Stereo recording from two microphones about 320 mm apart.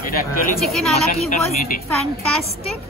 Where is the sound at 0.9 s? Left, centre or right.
Centre.